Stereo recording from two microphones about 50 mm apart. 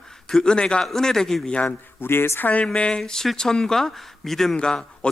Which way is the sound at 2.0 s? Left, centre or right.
Left.